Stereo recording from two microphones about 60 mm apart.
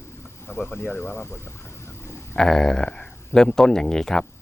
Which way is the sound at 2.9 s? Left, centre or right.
Left.